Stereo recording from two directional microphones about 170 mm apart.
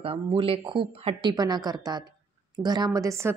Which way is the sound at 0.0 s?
30° right (ahead or behind).